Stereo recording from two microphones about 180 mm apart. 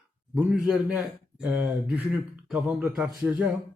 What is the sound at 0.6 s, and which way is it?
A man's voice, 5° right (ahead or behind).